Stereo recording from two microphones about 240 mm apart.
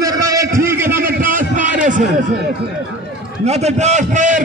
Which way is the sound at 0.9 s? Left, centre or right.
Right.